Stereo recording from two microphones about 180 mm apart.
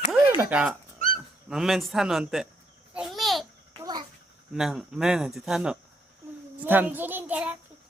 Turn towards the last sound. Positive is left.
turn(degrees=-10)  # may be behind; listen again after turning